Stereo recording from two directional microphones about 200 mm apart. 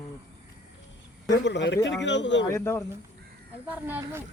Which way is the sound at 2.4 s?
15° left (ahead or behind).